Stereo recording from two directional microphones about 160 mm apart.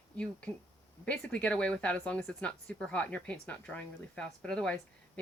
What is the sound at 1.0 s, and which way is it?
Speech, 5° left (ahead or behind).